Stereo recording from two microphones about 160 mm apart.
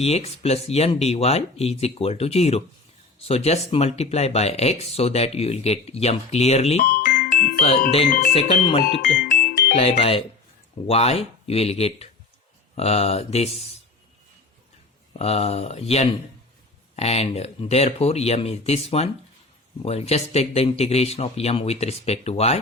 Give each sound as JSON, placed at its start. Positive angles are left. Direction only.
{"t": 0.0, "sound": "speech", "side_deg": 40}
{"t": 6.8, "sound": "music", "side_deg": 60}
{"t": 7.6, "sound": "speech", "side_deg": 40}
{"t": 9.0, "sound": "music", "side_deg": 65}
{"t": 9.7, "sound": "speech", "side_deg": 35}
{"t": 15.2, "sound": "speech", "side_deg": 40}